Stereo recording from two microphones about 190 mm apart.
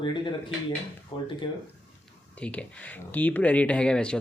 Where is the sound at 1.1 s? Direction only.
25° left (ahead or behind).